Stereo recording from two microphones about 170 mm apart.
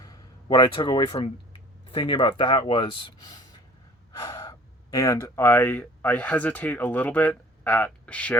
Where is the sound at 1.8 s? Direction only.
30° left (ahead or behind).